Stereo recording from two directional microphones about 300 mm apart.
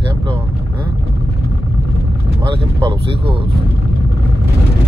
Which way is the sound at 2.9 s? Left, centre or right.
Centre.